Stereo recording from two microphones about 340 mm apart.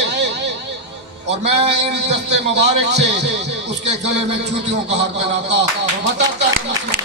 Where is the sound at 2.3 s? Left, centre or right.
Right.